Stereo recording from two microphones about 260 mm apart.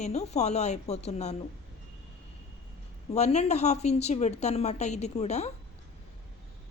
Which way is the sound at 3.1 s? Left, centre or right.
Left.